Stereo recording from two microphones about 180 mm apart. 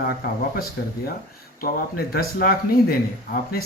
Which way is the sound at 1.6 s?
55° left (ahead or behind).